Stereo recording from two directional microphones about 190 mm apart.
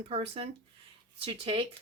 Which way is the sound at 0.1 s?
30° right (ahead or behind).